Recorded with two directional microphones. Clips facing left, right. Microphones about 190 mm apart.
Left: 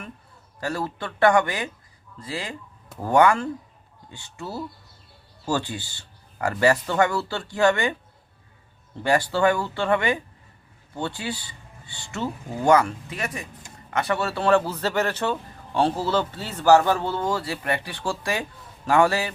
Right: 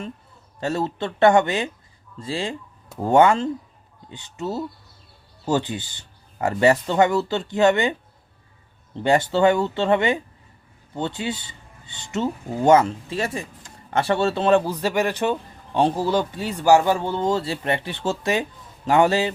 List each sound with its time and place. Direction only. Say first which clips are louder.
0.6 s speech: right 4 dB; 25° right (ahead or behind)
9.0 s a man's voice: right 3 dB; 20° right (ahead or behind)